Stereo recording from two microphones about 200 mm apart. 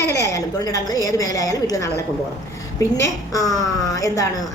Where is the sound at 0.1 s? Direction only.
15° left (ahead or behind).